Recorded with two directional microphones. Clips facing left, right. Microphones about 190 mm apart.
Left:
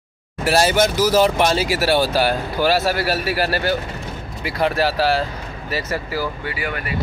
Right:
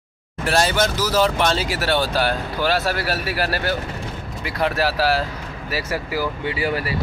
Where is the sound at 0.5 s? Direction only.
10° left (ahead or behind); by 6.2 s 10° right (ahead or behind).